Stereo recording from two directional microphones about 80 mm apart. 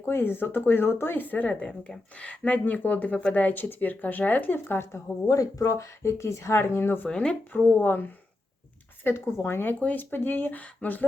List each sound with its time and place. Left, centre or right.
0.0 s speech: left
5.3 s speech: left
7.1 s speech: centre
7.5 s speech: left